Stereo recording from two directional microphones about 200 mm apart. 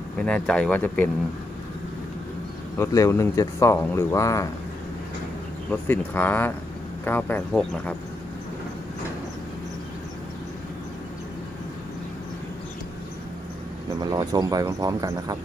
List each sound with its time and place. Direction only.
0.2 s speech: 5° left (ahead or behind)
2.8 s speech: 15° left (ahead or behind)
5.7 s speech: 10° left (ahead or behind)
14.1 s speech: 20° right (ahead or behind)